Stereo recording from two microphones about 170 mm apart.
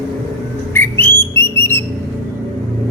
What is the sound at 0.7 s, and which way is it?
Whistle, 15° left (ahead or behind).